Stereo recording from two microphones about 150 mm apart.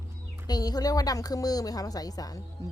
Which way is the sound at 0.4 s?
25° left (ahead or behind).